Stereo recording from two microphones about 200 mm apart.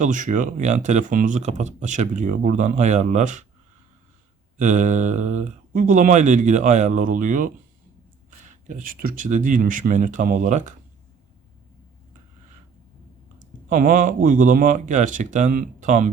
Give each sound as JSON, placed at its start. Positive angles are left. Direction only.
{"t": 0.0, "sound": "speech", "side_deg": -40}
{"t": 4.5, "sound": "speech", "side_deg": -40}
{"t": 13.7, "sound": "speech", "side_deg": -40}